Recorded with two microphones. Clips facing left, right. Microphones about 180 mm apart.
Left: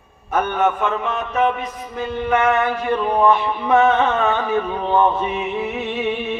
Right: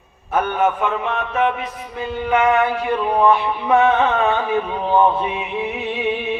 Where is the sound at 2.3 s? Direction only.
15° right (ahead or behind).